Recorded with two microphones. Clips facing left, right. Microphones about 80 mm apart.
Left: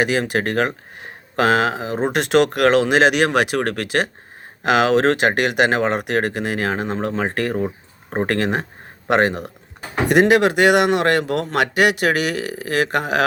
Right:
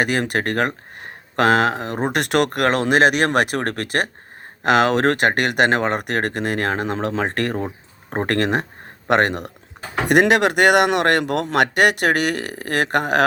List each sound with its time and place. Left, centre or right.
0.0 s a man's voice: right